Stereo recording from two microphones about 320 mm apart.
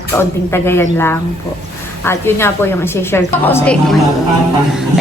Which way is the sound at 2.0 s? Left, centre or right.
Centre.